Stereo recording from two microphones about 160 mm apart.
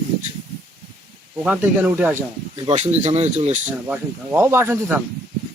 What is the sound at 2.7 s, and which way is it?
Speech, 45° right (ahead or behind).